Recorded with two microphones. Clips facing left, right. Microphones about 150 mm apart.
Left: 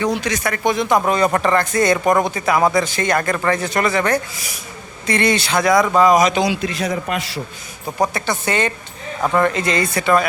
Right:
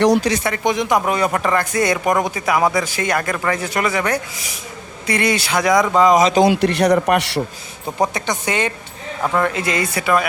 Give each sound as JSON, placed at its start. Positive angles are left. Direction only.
{"t": 0.1, "sound": "speech", "side_deg": -35}
{"t": 6.3, "sound": "a man's voice", "side_deg": -50}
{"t": 8.0, "sound": "speech", "side_deg": -15}